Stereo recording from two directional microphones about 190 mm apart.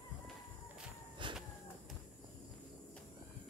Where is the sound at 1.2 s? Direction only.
25° right (ahead or behind).